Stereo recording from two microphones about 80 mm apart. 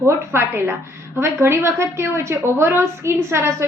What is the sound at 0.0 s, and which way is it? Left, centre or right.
A woman's voice, right.